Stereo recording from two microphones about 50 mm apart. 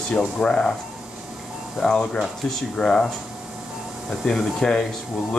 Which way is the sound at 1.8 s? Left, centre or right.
Centre.